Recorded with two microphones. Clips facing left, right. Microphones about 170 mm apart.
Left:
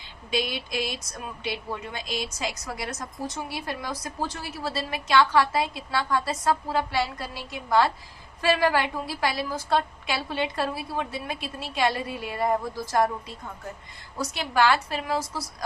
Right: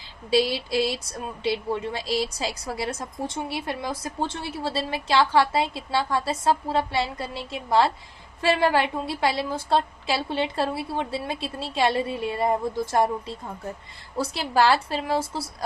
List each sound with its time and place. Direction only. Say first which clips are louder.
0.3 s a woman's voice: right 7 dB; 30° right (ahead or behind)